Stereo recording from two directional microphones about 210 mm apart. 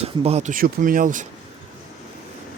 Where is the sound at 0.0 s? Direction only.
30° right (ahead or behind).